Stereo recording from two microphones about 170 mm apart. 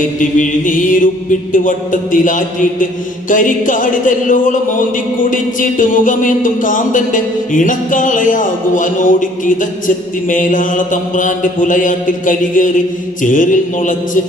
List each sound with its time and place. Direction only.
0.2 s music: 50° left (ahead or behind)